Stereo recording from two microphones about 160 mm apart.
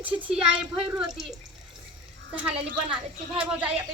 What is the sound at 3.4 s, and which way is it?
Speech, 10° right (ahead or behind).